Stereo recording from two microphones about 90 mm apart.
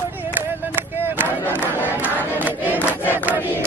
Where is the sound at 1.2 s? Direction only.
20° right (ahead or behind).